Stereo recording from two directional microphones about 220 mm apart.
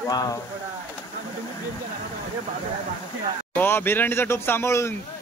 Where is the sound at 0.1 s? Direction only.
15° left (ahead or behind).